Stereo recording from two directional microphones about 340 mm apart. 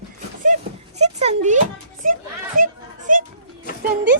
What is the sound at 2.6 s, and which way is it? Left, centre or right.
Children playing, right.